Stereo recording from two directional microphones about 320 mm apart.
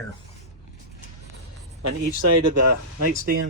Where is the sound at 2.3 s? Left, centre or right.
Right.